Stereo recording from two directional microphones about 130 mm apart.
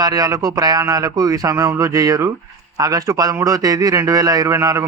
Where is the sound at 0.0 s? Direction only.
30° right (ahead or behind).